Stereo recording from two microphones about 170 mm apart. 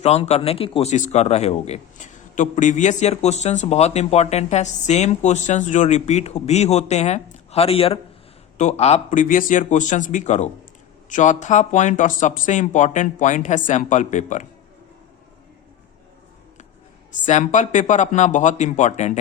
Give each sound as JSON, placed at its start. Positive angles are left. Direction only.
{"t": 0.0, "sound": "a man's voice", "side_deg": 40}
{"t": 17.2, "sound": "speech", "side_deg": 45}